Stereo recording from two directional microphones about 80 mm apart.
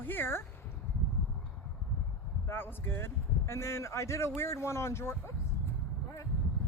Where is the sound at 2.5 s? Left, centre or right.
Left.